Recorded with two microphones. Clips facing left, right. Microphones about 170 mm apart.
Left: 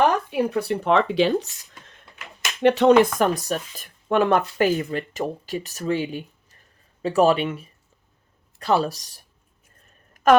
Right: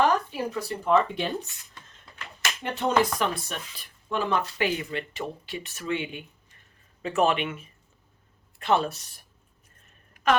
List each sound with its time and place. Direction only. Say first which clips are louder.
0.0 s speech: left 4 dB; 65° left (ahead or behind)
3.2 s speech: left 7 dB; 45° left (ahead or behind)
4.1 s a woman's voice: left 8 dB; 60° left (ahead or behind); by 9.2 s 35° left (ahead or behind)
10.2 s a sound: left 6 dB; 45° left (ahead or behind)